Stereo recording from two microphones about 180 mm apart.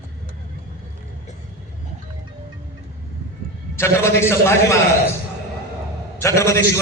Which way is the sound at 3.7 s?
15° left (ahead or behind).